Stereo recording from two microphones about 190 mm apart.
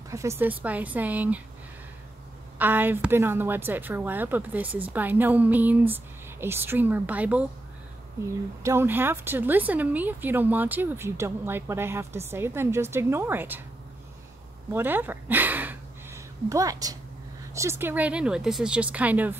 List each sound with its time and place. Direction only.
0.1 s a woman's voice: 15° right (ahead or behind)
2.6 s a woman's voice: 10° right (ahead or behind)
8.6 s a woman's voice: 10° right (ahead or behind)
14.7 s a woman's voice: 10° right (ahead or behind)